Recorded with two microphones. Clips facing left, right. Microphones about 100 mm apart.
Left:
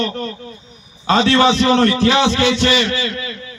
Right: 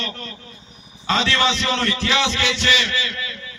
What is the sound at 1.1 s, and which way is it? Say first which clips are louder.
A man's voice: left 7 dB; 50° left (ahead or behind).